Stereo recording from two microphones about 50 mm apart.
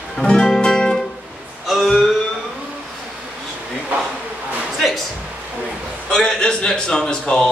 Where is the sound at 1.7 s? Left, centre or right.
Centre.